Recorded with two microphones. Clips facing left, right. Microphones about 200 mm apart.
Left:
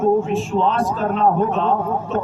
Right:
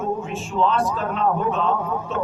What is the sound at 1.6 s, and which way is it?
Speech, 40° left (ahead or behind).